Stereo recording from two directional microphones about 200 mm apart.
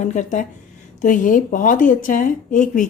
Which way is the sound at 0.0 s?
35° left (ahead or behind).